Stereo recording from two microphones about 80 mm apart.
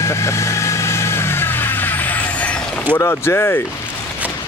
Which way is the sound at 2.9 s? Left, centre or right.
Left.